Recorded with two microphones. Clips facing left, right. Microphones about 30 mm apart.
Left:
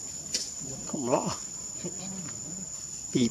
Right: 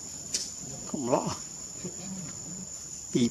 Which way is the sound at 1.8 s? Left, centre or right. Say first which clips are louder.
Left 1 dB; centre.